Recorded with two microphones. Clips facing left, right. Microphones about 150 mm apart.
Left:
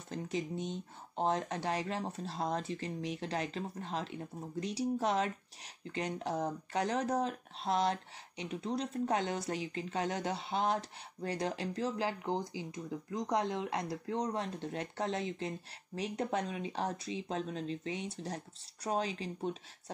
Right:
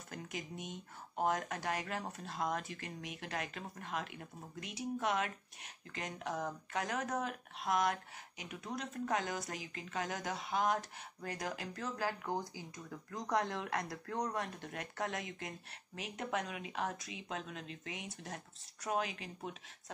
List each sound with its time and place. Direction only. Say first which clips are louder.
0.1 s speech: left 8 dB; 30° left (ahead or behind)